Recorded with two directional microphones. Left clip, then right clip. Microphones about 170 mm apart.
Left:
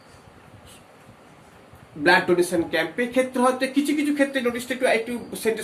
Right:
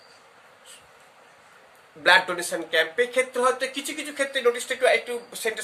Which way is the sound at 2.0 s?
30° right (ahead or behind).